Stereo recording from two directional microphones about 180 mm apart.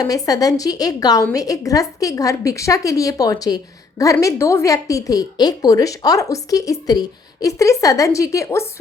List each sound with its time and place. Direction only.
0.0 s a woman's voice: 20° left (ahead or behind)